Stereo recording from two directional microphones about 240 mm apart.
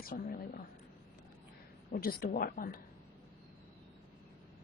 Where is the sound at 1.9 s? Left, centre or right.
Left.